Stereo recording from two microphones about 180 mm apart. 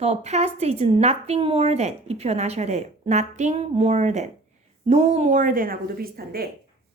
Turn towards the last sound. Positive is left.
turn(degrees=-55)  # may be behind; listen again after turning